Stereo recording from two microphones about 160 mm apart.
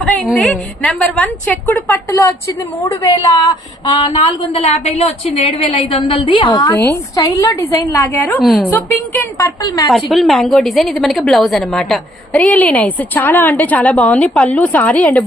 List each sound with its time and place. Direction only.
0.0 s a woman's voice: centre (ahead or behind)
3.8 s a woman's voice: 30° left (ahead or behind)
6.7 s a woman's voice: 10° left (ahead or behind)
9.6 s a woman's voice: 25° left (ahead or behind)
10.1 s a woman's voice: centre (ahead or behind)